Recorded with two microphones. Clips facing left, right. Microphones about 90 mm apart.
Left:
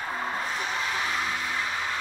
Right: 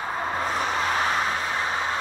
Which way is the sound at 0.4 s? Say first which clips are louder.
Right 5 dB; 50° right (ahead or behind).